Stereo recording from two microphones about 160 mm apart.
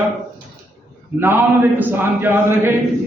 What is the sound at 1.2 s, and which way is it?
A man's voice, 15° right (ahead or behind).